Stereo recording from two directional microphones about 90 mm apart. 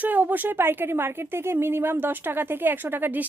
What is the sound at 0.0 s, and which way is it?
Speech, 20° right (ahead or behind).